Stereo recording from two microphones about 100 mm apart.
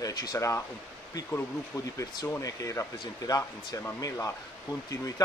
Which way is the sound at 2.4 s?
30° left (ahead or behind).